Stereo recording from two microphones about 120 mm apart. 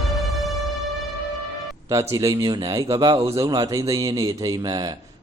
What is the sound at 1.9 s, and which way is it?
A man's voice, 25° right (ahead or behind).